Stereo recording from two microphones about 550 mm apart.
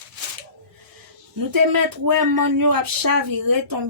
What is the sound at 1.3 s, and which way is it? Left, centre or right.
Speech, right.